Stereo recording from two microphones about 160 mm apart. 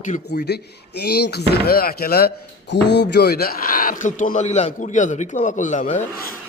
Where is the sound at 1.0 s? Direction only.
85° left; by 6.0 s 50° left (ahead or behind).